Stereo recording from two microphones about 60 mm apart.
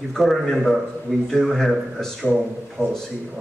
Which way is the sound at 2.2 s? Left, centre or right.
Centre.